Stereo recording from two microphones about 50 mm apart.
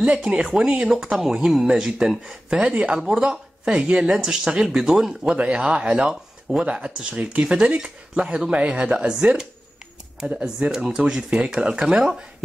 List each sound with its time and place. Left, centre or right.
0.0 s speech: centre
2.6 s speech: right
5.3 s speech: right
10.4 s speech: centre
11.2 s speech: right
11.5 s speech: centre